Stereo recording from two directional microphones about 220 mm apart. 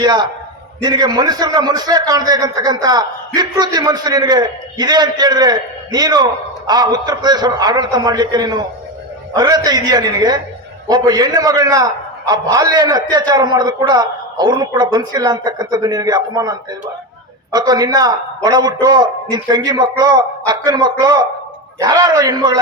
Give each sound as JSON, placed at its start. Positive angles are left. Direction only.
{"t": 0.0, "sound": "a man's voice", "side_deg": -20}